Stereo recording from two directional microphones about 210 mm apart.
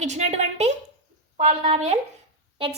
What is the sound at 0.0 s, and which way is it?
A woman's voice, 30° right (ahead or behind).